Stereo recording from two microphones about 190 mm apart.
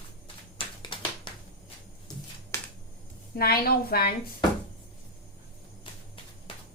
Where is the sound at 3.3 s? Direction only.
55° left (ahead or behind).